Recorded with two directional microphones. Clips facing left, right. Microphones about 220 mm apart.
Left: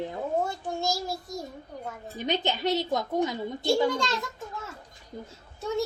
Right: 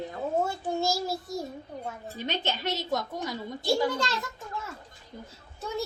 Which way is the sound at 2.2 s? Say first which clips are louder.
Left 4 dB; 15° left (ahead or behind).